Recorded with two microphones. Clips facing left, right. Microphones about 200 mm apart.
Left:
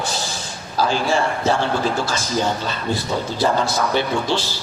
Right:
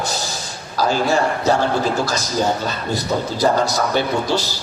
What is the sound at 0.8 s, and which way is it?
A man's voice, 40° right (ahead or behind).